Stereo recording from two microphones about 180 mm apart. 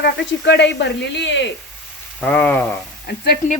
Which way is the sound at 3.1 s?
70° left (ahead or behind).